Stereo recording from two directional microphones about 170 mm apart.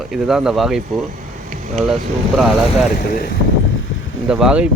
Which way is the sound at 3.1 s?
60° left (ahead or behind).